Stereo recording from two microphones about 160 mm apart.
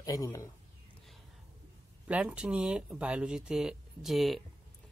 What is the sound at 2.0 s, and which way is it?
Speech, 10° right (ahead or behind).